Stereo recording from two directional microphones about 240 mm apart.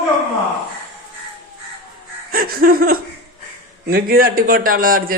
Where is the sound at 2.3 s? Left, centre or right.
Right.